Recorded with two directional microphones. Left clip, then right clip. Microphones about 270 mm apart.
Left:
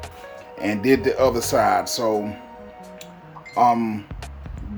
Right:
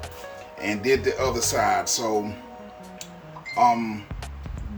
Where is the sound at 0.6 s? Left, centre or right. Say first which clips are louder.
Left 3 dB; left.